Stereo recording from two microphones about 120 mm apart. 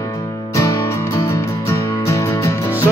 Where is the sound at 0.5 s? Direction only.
30° left (ahead or behind).